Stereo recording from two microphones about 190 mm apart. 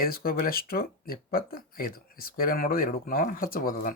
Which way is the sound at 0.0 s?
50° left (ahead or behind).